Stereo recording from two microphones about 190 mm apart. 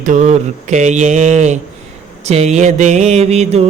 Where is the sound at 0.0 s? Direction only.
40° right (ahead or behind).